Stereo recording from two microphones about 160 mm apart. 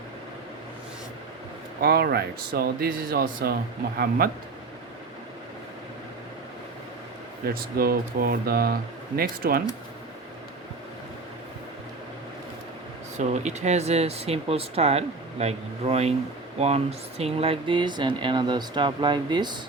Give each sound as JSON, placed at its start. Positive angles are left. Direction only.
{"t": 1.8, "sound": "speech", "side_deg": -75}
{"t": 7.4, "sound": "speech", "side_deg": -70}
{"t": 13.1, "sound": "speech", "side_deg": -45}